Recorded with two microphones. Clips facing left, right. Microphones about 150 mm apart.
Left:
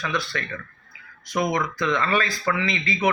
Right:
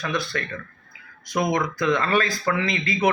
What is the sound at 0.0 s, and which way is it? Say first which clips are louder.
Speech: right 1 dB; 45° right (ahead or behind).